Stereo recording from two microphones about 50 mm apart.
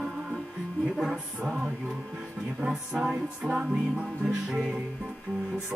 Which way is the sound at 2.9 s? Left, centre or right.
Centre.